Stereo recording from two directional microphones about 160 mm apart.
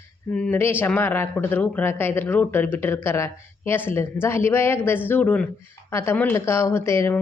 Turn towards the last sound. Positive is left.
turn(degrees=15)  # may be behind; listen again after turning